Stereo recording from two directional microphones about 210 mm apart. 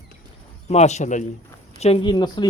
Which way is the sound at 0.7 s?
30° left (ahead or behind).